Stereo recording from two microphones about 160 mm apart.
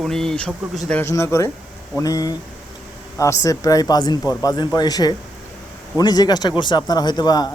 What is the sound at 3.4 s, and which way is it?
Speech, 20° left (ahead or behind).